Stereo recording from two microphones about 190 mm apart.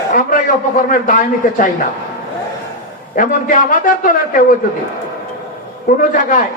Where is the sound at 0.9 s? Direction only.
45° left (ahead or behind).